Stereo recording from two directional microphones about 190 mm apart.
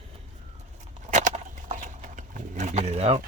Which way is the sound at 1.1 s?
40° right (ahead or behind).